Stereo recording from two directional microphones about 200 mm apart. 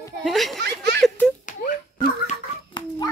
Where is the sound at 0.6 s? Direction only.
55° right (ahead or behind).